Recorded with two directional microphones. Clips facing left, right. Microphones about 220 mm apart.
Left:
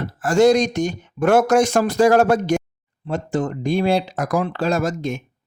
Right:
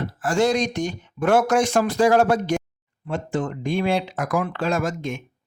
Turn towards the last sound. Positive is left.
turn(degrees=35)  # may be behind; listen again after turning